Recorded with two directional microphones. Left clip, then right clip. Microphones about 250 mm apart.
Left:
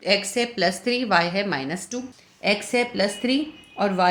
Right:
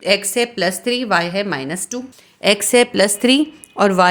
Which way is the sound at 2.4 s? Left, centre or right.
Right.